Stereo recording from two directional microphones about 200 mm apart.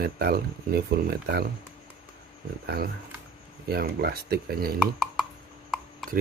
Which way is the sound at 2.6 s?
50° right (ahead or behind).